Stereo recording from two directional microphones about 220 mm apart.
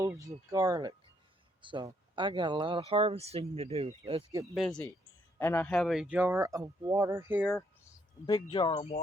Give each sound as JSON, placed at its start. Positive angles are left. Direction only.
{"t": 0.0, "sound": "speech", "side_deg": -15}
{"t": 4.5, "sound": "speech", "side_deg": 0}
{"t": 8.3, "sound": "speech", "side_deg": 20}